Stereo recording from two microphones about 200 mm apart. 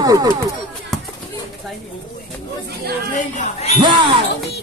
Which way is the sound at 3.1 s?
30° left (ahead or behind).